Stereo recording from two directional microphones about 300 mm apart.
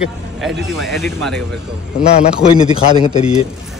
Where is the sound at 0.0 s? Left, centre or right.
Centre.